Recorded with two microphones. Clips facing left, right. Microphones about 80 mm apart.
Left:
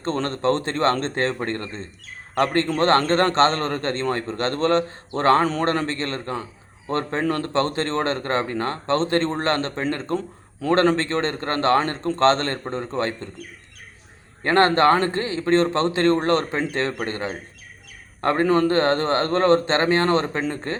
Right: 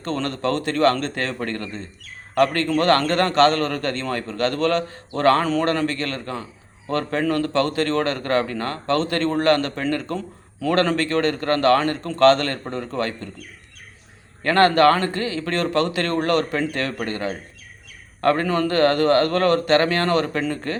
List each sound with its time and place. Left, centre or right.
0.0 s a man's voice: left
14.4 s speech: left